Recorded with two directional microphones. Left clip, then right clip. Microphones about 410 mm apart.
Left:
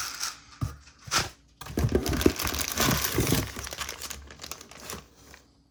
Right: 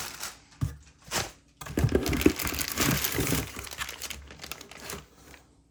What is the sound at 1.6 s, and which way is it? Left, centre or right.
Crumpling, centre.